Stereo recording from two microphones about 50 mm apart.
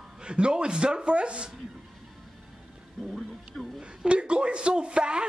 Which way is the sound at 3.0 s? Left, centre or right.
Centre.